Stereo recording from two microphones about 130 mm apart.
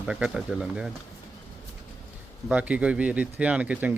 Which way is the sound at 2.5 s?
10° right (ahead or behind).